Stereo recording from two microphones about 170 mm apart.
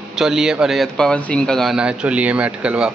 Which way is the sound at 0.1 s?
Centre (ahead or behind).